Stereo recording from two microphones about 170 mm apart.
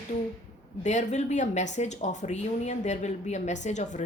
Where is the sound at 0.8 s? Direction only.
45° left (ahead or behind).